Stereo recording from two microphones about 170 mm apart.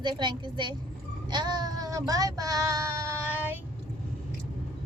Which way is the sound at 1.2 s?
25° right (ahead or behind).